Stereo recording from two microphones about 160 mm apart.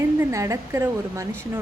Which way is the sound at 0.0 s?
15° right (ahead or behind).